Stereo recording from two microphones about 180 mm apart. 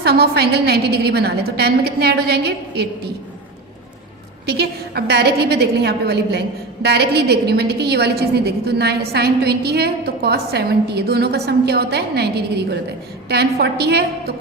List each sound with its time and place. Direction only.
0.0 s a woman's voice: 60° right (ahead or behind)
4.4 s a woman's voice: 65° right (ahead or behind)